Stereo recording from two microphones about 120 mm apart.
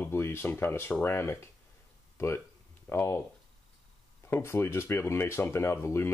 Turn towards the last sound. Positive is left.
turn(degrees=20)  # may be behind; listen again after turning